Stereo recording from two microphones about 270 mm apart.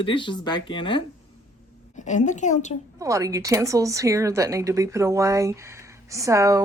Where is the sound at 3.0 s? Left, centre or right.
Centre.